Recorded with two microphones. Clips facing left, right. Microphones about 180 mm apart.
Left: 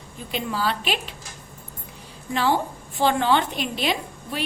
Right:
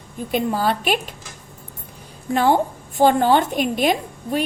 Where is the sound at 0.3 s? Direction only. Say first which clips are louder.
Right 6 dB; 50° right (ahead or behind).